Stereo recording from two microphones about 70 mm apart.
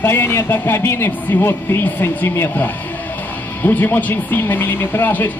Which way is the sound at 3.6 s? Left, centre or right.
Left.